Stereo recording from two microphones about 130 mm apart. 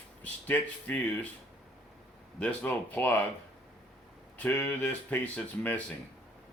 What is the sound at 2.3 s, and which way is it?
Speech, 10° left (ahead or behind).